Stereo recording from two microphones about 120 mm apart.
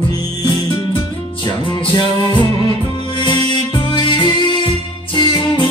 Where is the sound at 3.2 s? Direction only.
55° right (ahead or behind).